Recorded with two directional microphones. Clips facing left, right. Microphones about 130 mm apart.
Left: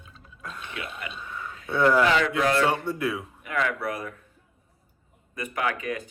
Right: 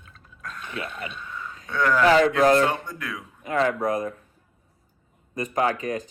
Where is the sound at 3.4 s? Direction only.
35° right (ahead or behind).